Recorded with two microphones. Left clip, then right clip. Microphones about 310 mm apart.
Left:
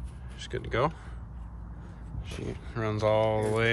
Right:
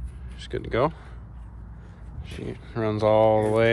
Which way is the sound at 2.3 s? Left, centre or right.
Centre.